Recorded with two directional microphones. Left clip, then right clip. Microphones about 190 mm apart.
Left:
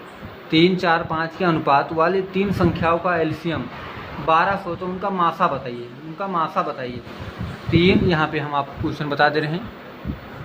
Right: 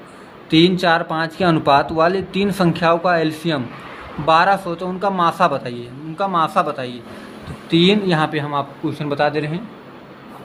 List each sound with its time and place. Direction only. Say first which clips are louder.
0.5 s a man's voice: right 3 dB; 25° right (ahead or behind); by 9.6 s 10° right (ahead or behind)